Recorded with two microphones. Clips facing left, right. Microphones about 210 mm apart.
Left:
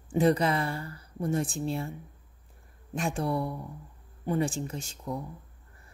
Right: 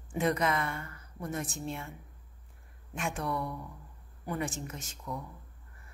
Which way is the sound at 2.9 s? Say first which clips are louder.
Left 5 dB; 35° left (ahead or behind).